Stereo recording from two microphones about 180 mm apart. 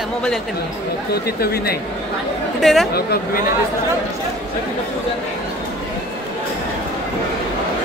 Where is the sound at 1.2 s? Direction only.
60° left (ahead or behind).